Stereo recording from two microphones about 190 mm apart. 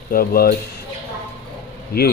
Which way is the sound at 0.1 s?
50° left (ahead or behind).